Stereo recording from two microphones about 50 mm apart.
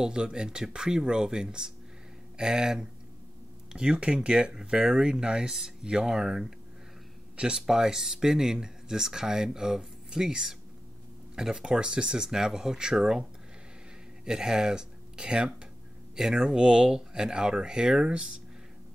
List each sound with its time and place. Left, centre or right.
0.0 s speech: centre
7.6 s speech: centre
14.2 s speech: centre